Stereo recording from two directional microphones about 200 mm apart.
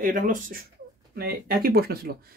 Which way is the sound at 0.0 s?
45° right (ahead or behind).